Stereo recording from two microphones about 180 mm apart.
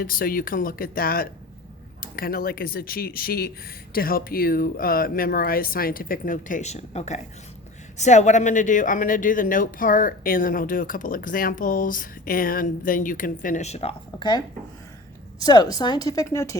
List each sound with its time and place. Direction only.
0.0 s a woman's voice: 50° left (ahead or behind); by 16.6 s 15° left (ahead or behind)